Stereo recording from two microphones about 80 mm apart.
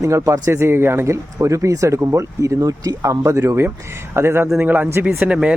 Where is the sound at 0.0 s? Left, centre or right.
Right.